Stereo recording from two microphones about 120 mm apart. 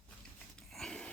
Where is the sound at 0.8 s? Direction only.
5° left (ahead or behind).